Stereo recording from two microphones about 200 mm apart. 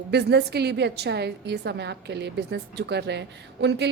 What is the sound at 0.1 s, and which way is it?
A woman's voice, 55° right (ahead or behind).